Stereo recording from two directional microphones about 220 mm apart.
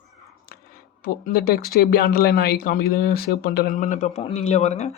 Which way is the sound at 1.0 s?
40° left (ahead or behind).